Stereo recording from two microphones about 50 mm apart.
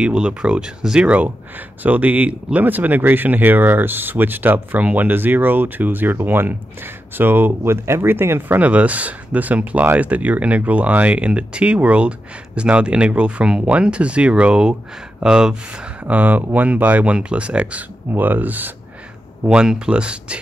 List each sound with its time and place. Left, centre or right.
0.0 s speech: centre
1.8 s speech: right
7.7 s speech: right
8.5 s speech: right; by 15.5 s centre
16.1 s speech: right
18.1 s speech: right
19.4 s speech: centre